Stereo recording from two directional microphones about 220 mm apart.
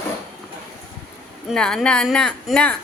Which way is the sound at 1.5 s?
5° left (ahead or behind).